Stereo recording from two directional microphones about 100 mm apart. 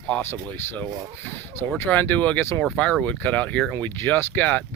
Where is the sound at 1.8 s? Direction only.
20° left (ahead or behind).